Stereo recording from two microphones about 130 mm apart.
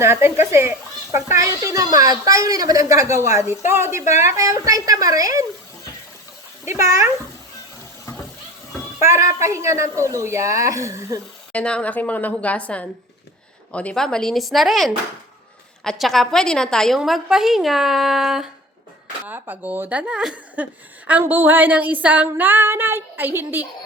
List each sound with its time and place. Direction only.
0.0 s speech: 20° right (ahead or behind)
3.7 s a sound: 20° right (ahead or behind)
4.2 s speech: 25° right (ahead or behind)
6.7 s speech: 25° right (ahead or behind)
9.0 s speech: 20° right (ahead or behind)
11.5 s a woman's voice: 10° left (ahead or behind)
19.2 s a sound: 15° right (ahead or behind)